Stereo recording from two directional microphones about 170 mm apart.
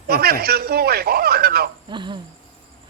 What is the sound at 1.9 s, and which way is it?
Speech, 30° right (ahead or behind).